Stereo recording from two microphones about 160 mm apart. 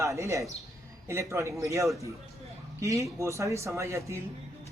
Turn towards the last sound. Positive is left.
turn(degrees=-20)  # may be behind; listen again after turning